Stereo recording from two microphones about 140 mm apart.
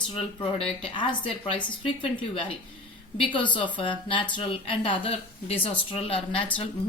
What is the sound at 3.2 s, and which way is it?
Speech, 35° left (ahead or behind).